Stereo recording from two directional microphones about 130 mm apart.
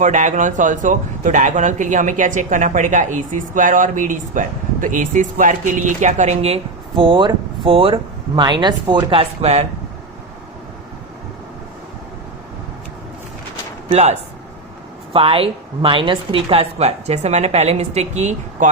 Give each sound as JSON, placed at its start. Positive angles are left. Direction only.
{"t": 0.0, "sound": "speech", "side_deg": -70}
{"t": 6.9, "sound": "speech", "side_deg": -40}
{"t": 8.4, "sound": "speech", "side_deg": -35}
{"t": 13.8, "sound": "speech", "side_deg": -55}
{"t": 15.1, "sound": "a woman's voice", "side_deg": -45}